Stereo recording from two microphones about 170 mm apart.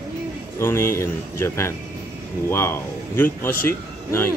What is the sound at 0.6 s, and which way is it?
Speech, 15° left (ahead or behind).